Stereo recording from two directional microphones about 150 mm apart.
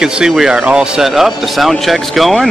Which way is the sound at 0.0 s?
5° right (ahead or behind).